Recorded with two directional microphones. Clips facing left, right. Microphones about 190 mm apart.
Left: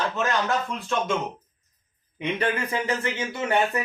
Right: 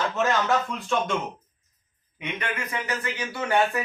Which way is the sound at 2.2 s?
30° left (ahead or behind).